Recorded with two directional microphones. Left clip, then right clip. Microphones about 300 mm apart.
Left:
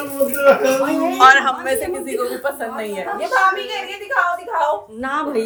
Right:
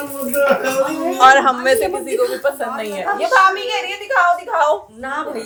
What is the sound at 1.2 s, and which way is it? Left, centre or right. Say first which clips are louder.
Speech: right 1 dB; centre.